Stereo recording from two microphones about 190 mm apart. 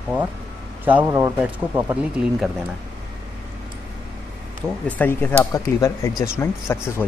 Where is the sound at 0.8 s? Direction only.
10° right (ahead or behind).